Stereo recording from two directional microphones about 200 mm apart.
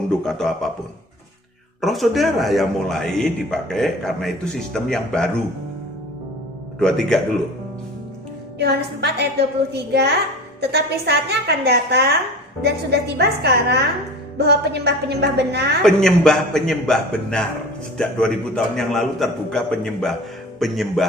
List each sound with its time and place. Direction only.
0.1 s a man's voice: 5° left (ahead or behind)
1.8 s a man's voice: centre (ahead or behind)
6.7 s a man's voice: centre (ahead or behind)
8.5 s a woman's voice: 55° right (ahead or behind)
15.8 s a man's voice: 5° left (ahead or behind)